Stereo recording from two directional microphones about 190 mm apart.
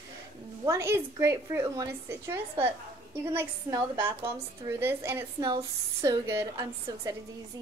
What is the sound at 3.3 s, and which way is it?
A woman's voice, 15° right (ahead or behind).